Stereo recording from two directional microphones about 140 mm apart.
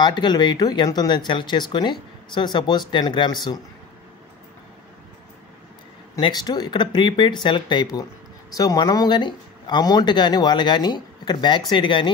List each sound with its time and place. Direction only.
0.0 s speech: 30° left (ahead or behind)
6.2 s speech: 30° left (ahead or behind)